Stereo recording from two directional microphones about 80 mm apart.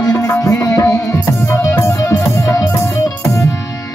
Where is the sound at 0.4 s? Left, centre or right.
Left.